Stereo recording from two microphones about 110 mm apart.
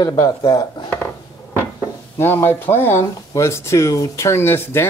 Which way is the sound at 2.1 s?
20° left (ahead or behind).